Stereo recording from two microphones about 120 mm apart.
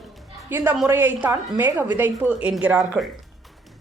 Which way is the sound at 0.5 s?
15° right (ahead or behind).